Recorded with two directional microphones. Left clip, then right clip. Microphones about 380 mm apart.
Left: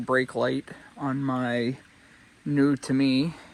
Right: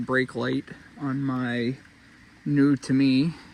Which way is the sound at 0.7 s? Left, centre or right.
Left.